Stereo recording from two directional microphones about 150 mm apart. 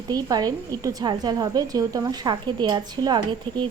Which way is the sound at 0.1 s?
25° right (ahead or behind).